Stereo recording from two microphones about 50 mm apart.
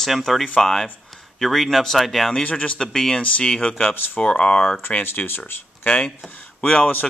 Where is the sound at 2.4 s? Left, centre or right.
Left.